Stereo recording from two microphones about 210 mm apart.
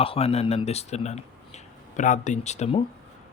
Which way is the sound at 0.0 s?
25° left (ahead or behind).